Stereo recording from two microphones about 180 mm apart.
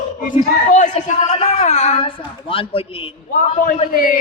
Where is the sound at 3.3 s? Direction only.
45° left (ahead or behind).